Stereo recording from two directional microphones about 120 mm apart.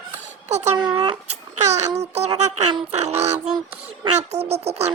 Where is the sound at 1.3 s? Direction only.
70° right (ahead or behind).